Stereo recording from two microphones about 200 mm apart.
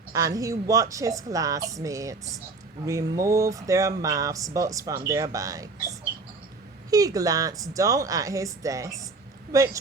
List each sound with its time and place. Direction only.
0.1 s a woman's voice: 15° right (ahead or behind)
6.9 s a woman's voice: 15° right (ahead or behind)